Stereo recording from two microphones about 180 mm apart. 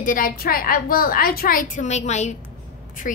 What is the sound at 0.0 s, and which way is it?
A woman's voice, 50° left (ahead or behind).